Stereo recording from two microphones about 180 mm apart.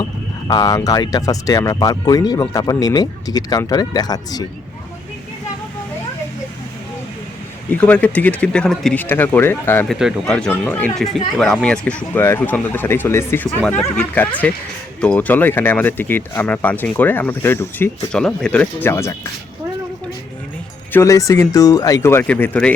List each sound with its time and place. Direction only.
0.0 s speech: 20° left (ahead or behind)
7.7 s speech: 10° left (ahead or behind)
9.9 s speech: centre (ahead or behind); by 19.1 s 15° left (ahead or behind)
20.9 s speech: 15° left (ahead or behind)